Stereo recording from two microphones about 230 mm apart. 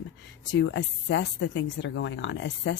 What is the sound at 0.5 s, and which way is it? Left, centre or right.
Speech, left.